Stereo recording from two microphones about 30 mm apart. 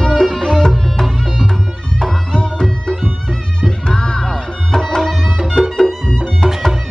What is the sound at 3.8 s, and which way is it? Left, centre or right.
Music, left.